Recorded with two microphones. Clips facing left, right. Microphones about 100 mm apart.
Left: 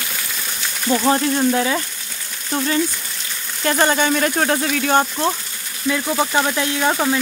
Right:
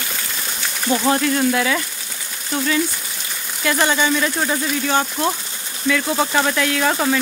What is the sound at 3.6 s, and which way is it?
Speech, 40° left (ahead or behind).